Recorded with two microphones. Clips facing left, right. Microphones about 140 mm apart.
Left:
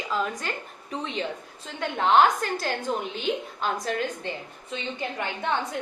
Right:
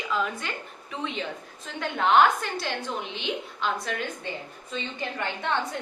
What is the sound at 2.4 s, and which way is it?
A woman's voice, 45° left (ahead or behind).